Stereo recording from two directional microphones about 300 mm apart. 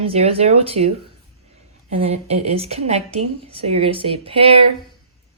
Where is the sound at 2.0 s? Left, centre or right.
Right.